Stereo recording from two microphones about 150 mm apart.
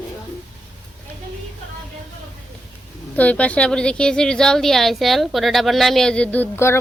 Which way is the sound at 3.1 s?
10° left (ahead or behind).